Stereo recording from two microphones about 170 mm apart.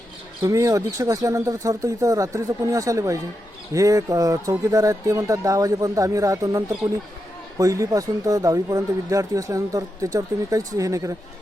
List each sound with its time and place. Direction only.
0.4 s speech: 20° right (ahead or behind)
7.6 s speech: 20° right (ahead or behind)